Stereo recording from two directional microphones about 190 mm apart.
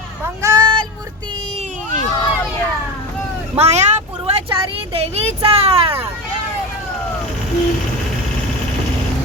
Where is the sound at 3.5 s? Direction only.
35° right (ahead or behind).